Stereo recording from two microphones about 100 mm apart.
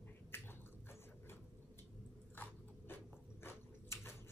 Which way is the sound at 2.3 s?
20° left (ahead or behind).